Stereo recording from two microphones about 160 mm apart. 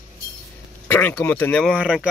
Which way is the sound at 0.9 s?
10° left (ahead or behind).